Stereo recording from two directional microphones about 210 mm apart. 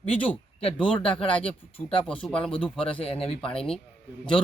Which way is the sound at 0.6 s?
25° left (ahead or behind).